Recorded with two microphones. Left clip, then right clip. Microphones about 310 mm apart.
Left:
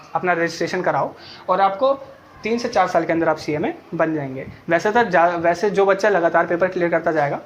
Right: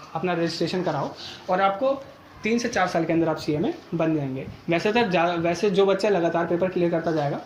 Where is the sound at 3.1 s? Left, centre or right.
Left.